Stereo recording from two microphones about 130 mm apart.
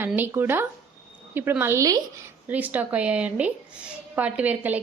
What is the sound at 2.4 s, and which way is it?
A woman's voice, 10° right (ahead or behind).